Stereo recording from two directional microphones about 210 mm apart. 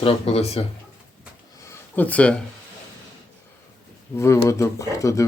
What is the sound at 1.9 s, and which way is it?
Speech, 5° left (ahead or behind).